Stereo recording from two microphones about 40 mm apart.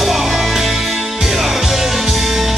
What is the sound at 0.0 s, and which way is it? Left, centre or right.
Music, centre.